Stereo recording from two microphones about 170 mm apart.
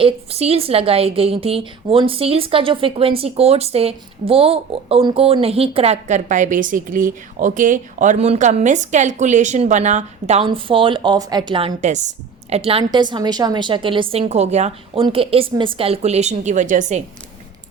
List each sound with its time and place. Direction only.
0.0 s a woman's voice: 35° right (ahead or behind)
11.8 s a woman's voice: 45° right (ahead or behind)